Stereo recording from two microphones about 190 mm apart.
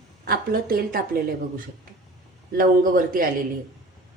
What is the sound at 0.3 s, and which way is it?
Speech, 50° right (ahead or behind).